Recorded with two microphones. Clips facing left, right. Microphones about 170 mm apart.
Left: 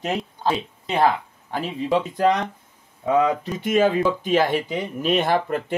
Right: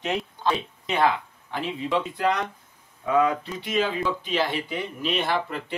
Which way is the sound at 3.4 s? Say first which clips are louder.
Left 7 dB; 45° left (ahead or behind).